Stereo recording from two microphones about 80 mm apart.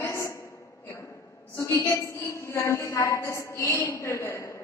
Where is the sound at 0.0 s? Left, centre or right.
Left.